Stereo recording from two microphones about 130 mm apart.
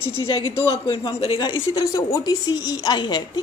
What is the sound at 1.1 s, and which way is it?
Speech, 45° left (ahead or behind).